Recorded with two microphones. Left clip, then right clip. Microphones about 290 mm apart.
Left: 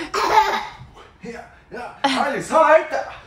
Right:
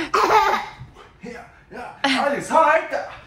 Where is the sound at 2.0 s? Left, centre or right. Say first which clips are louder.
Even; centre.